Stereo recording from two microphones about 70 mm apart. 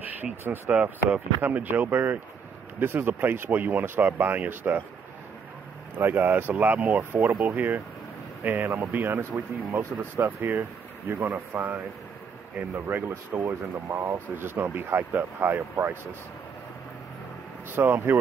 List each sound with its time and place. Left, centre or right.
0.0 s speech: right
5.9 s speech: right
12.7 s speech: right
17.7 s speech: right